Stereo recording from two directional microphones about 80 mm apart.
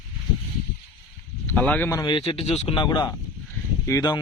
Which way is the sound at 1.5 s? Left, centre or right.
Left.